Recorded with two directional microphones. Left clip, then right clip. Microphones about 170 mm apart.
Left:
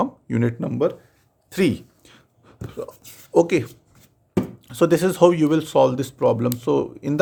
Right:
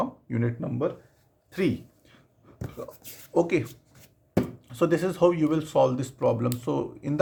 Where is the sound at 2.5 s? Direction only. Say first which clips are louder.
Left 2 dB; 55° left (ahead or behind).